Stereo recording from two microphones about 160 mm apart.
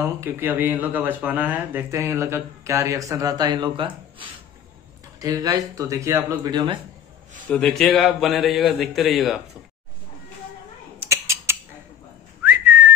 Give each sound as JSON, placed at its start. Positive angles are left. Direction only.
{"t": 0.2, "sound": "speech", "side_deg": -10}
{"t": 7.4, "sound": "a man's voice", "side_deg": 0}
{"t": 11.1, "sound": "a sound", "side_deg": -20}
{"t": 12.4, "sound": "whistling", "side_deg": -10}